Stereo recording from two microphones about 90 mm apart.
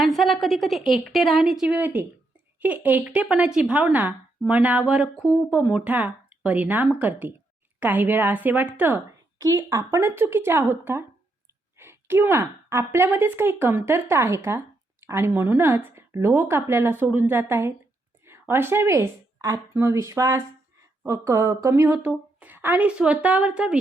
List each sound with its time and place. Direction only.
0.0 s a woman's voice: centre (ahead or behind)
1.7 s a woman's voice: 20° right (ahead or behind)
9.4 s a woman's voice: 40° right (ahead or behind)
21.7 s a woman's voice: 20° right (ahead or behind)